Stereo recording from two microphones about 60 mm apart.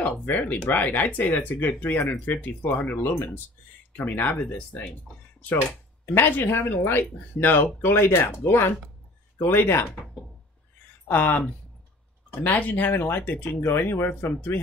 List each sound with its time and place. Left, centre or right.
0.0 s speech: left
6.1 s speech: left
11.1 s speech: left